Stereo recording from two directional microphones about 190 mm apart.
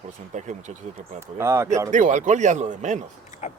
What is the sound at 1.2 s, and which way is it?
Speech, 15° right (ahead or behind).